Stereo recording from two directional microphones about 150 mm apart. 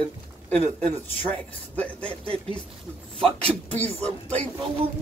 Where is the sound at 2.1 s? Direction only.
40° right (ahead or behind).